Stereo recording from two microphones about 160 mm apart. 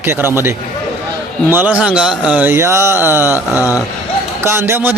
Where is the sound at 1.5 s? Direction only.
15° right (ahead or behind).